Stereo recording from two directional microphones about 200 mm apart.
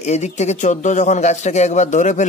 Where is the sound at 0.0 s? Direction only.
35° left (ahead or behind).